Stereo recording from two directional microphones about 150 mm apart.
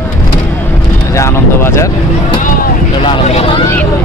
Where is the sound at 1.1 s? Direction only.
20° left (ahead or behind).